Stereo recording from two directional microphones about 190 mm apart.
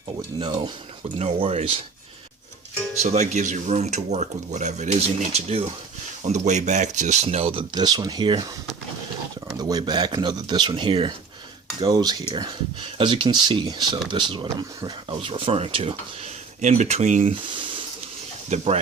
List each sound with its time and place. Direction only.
0.3 s speech: 25° right (ahead or behind)
3.0 s speech: 35° right (ahead or behind)
9.6 s speech: 20° right (ahead or behind); by 17.3 s 40° right (ahead or behind)
17.5 s a sound: 25° right (ahead or behind)
18.4 s speech: 35° right (ahead or behind)